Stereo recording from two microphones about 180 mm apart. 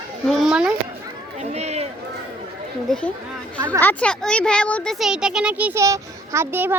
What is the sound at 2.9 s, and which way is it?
Speech, 5° left (ahead or behind).